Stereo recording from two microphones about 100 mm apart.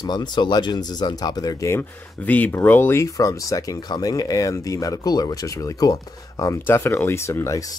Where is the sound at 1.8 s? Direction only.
15° left (ahead or behind); by 6.5 s 40° left (ahead or behind).